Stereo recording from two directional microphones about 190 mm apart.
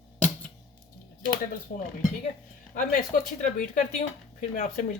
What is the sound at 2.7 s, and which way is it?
Dishes, 45° left (ahead or behind).